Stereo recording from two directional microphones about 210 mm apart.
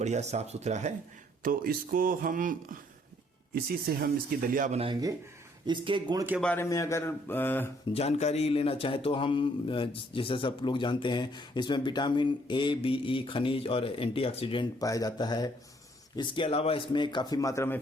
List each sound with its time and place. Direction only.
0.0 s speech: 35° right (ahead or behind)
4.8 s speech: 20° right (ahead or behind)
6.4 s speech: 10° left (ahead or behind)
7.9 s speech: 30° left (ahead or behind); by 17.7 s 15° left (ahead or behind)